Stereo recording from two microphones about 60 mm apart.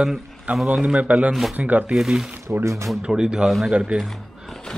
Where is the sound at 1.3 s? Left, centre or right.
Centre.